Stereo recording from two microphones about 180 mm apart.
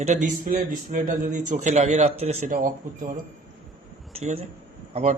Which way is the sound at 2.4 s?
50° right (ahead or behind).